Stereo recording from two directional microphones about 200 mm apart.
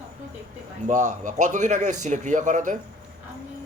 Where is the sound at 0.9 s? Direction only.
35° right (ahead or behind).